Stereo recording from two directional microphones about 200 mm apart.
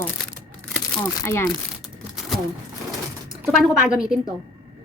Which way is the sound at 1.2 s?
15° left (ahead or behind).